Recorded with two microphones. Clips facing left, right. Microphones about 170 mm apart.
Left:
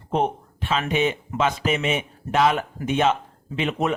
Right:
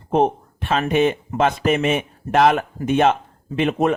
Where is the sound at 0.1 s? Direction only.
50° right (ahead or behind).